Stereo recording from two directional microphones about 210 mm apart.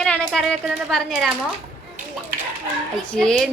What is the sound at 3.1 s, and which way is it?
Speech, 5° left (ahead or behind).